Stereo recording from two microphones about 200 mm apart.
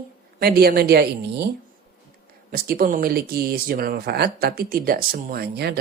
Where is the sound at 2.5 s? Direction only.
45° right (ahead or behind).